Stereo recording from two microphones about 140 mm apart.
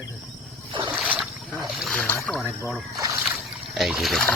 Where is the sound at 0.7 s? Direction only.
35° right (ahead or behind).